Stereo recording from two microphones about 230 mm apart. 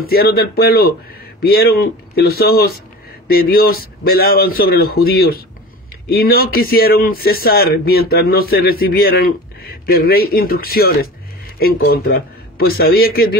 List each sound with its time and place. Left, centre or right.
0.0 s a man's voice: left